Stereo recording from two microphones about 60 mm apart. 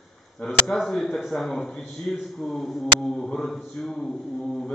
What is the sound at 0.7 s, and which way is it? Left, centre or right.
A man's voice, centre.